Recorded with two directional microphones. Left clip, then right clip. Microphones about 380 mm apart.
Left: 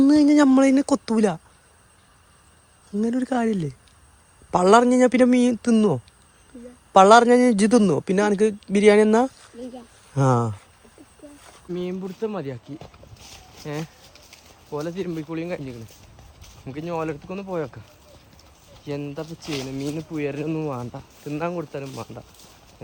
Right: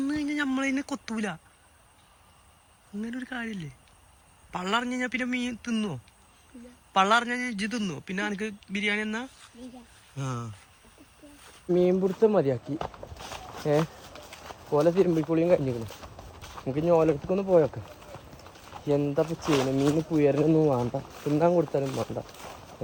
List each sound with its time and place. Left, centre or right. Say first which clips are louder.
0.0 s speech: left 13 dB; centre
3.0 s speech: left 12 dB; centre
11.7 s speech: right 7 dB; centre
18.9 s speech: right 6 dB; centre